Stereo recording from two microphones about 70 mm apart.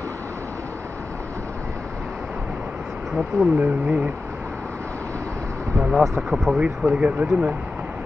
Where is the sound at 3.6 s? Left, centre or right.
Right.